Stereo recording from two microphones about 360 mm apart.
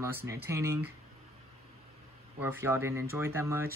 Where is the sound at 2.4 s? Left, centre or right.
Centre.